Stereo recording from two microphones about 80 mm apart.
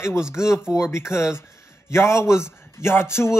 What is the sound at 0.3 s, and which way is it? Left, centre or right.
Speech, left.